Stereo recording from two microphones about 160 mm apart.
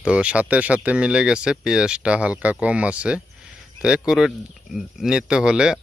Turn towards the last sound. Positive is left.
turn(degrees=-5)  # may be behind; listen again after turning